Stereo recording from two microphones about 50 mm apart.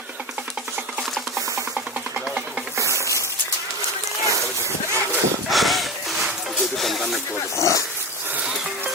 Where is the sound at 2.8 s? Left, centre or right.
Left.